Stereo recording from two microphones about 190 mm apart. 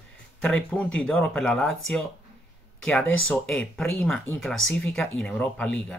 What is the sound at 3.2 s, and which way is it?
Speech, 5° left (ahead or behind).